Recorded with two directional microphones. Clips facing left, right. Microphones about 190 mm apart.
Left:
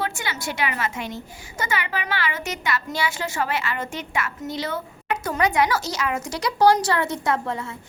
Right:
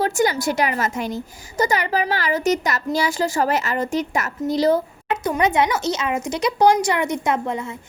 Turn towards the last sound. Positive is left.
turn(degrees=-20)  # may be behind; listen again after turning